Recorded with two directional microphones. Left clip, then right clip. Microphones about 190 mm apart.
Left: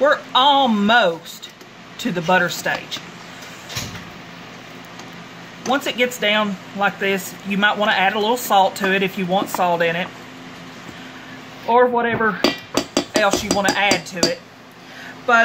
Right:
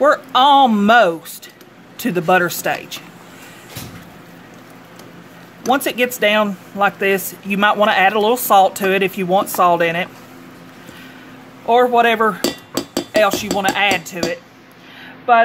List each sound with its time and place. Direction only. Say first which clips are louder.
0.0 s speech: right 2 dB; 50° right (ahead or behind)
5.7 s speech: right 3 dB; 50° right (ahead or behind)
11.7 s speech: right 3 dB; 55° right (ahead or behind)
15.3 s a sound: right 3 dB; 40° right (ahead or behind)